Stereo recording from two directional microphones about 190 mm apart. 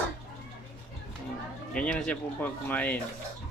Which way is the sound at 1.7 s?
5° left (ahead or behind).